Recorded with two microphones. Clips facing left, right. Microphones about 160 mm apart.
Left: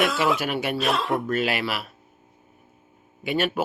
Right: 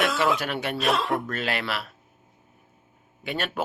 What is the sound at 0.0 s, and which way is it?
Speech, centre (ahead or behind).